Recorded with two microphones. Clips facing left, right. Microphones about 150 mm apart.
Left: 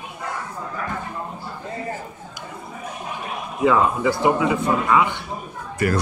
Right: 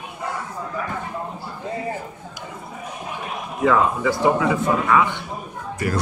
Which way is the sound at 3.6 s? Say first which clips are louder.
Left 1 dB; 15° left (ahead or behind).